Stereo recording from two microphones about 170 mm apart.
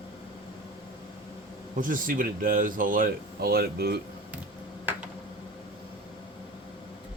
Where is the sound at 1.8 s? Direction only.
55° right (ahead or behind).